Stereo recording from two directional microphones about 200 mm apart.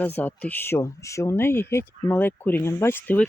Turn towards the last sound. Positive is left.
turn(degrees=10)  # may be behind; listen again after turning